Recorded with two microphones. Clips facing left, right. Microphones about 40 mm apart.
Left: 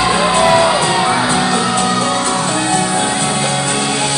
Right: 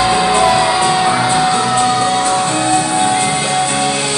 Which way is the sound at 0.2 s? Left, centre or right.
Left.